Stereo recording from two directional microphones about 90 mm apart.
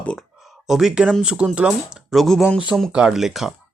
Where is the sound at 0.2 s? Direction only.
Centre (ahead or behind).